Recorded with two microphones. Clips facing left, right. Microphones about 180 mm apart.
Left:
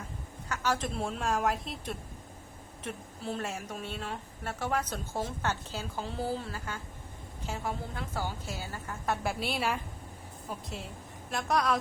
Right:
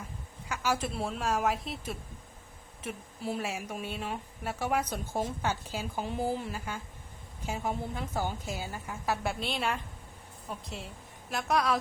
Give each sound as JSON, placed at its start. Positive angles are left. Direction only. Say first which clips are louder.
{"t": 0.4, "sound": "a woman's voice", "louder": "even", "side_deg": -10}
{"t": 9.0, "sound": "a woman's voice", "louder": "even", "side_deg": 0}